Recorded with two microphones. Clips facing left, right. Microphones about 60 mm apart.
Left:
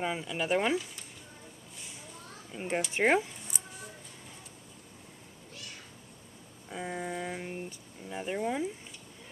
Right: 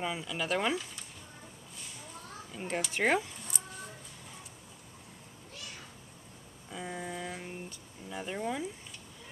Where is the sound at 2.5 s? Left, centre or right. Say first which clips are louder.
Left 3 dB; left.